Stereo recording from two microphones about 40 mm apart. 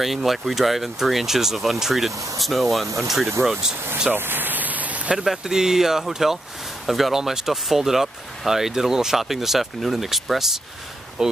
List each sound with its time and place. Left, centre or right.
0.0 s speech: centre
4.1 s a sound: right
5.1 s speech: centre